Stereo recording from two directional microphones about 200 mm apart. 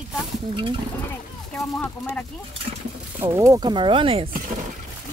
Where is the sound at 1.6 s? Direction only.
5° left (ahead or behind).